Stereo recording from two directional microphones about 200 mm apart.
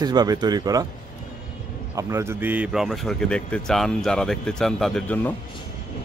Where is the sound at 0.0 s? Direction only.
20° right (ahead or behind).